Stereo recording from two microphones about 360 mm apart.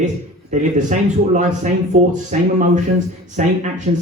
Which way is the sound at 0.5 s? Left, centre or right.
Centre.